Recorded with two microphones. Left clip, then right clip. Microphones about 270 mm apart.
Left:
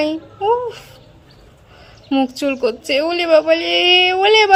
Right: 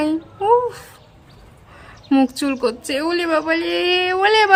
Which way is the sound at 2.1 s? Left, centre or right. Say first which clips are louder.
Even; centre.